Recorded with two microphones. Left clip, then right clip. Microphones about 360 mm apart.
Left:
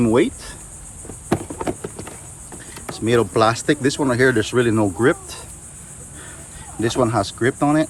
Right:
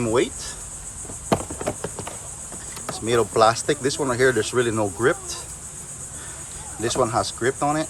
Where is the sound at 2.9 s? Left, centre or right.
Left.